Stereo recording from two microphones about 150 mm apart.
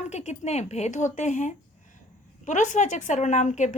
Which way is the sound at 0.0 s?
50° left (ahead or behind).